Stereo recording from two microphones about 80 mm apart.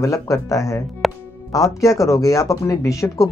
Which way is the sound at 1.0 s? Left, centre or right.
Centre.